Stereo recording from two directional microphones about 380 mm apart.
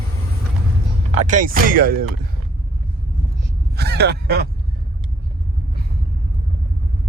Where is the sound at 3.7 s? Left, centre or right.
Right.